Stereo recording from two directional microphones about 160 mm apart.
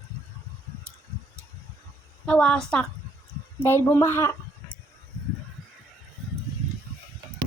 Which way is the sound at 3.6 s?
15° left (ahead or behind).